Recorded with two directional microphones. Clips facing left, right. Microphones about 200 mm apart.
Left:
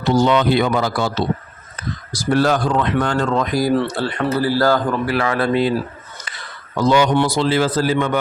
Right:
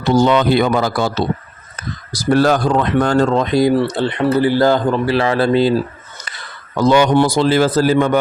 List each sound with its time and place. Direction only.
0.2 s speech: 45° right (ahead or behind); by 5.7 s 30° right (ahead or behind)
6.8 s speech: 55° right (ahead or behind)
7.1 s speech: 40° right (ahead or behind)